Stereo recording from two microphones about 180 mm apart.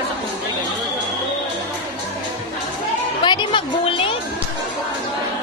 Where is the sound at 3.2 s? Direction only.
25° left (ahead or behind).